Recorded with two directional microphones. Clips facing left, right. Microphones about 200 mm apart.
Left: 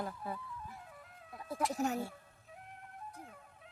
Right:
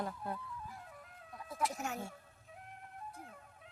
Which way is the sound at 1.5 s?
35° left (ahead or behind).